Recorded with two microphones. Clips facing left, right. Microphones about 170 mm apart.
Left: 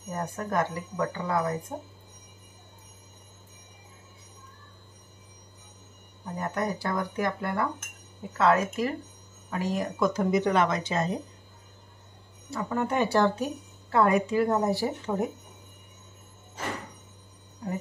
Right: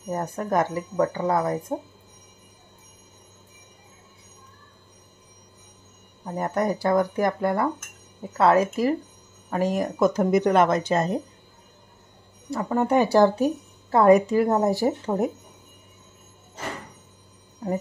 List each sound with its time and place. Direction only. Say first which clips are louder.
0.1 s speech: right 5 dB; 40° right (ahead or behind)
6.3 s speech: right 6 dB; 45° right (ahead or behind)
9.5 s speech: right 6 dB; 50° right (ahead or behind)
12.4 s speech: right 6 dB; 40° right (ahead or behind)